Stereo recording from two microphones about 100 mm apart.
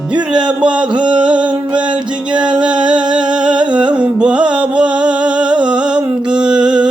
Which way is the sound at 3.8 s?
10° right (ahead or behind).